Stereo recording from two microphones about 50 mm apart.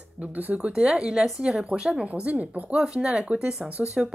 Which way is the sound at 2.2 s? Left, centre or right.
Right.